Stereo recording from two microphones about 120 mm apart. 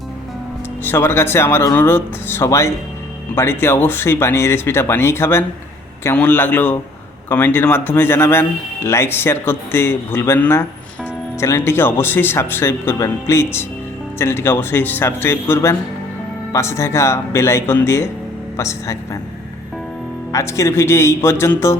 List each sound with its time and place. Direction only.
0.9 s a man's voice: 20° left (ahead or behind)
20.3 s speech: 25° left (ahead or behind)